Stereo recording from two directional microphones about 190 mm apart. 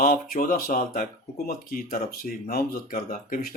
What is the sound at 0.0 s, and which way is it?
Speech, 50° left (ahead or behind).